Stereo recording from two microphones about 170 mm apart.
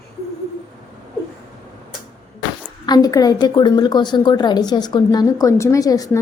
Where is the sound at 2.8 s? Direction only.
25° left (ahead or behind).